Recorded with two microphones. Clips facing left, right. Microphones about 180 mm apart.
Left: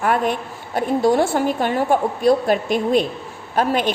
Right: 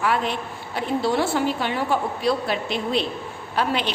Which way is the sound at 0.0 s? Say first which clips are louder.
Left 4 dB; 50° left (ahead or behind).